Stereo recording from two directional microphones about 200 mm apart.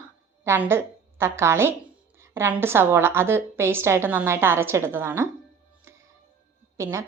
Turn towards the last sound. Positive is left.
turn(degrees=-15)  # may be behind; listen again after turning